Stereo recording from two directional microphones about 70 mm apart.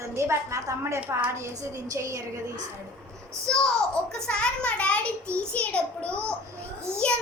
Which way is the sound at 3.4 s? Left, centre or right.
Centre.